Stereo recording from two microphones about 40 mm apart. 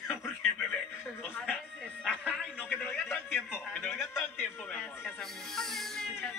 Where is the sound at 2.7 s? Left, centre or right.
Left.